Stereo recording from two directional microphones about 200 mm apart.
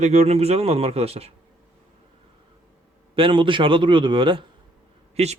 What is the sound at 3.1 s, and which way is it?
A man's voice, 25° right (ahead or behind).